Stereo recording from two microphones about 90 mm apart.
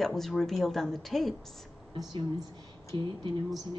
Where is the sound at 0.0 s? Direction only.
5° left (ahead or behind).